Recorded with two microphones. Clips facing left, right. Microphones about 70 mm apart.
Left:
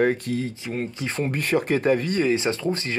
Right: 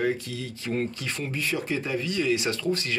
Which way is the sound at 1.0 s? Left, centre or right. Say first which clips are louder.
Left 6 dB; left.